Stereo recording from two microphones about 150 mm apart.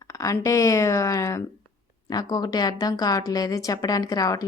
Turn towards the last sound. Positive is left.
turn(degrees=25)  # may be behind; listen again after turning